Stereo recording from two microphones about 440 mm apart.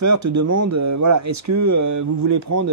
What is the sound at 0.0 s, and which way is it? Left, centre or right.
Speech, right.